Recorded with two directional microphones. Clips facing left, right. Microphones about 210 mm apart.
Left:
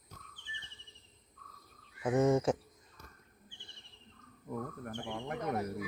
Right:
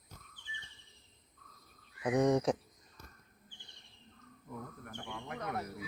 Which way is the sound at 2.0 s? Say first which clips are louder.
Left 1 dB; 5° left (ahead or behind).